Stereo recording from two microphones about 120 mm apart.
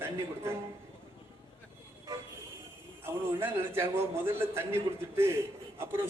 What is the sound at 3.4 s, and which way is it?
A man's voice, 20° right (ahead or behind).